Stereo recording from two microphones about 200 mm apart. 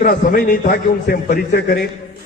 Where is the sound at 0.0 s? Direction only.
45° left (ahead or behind).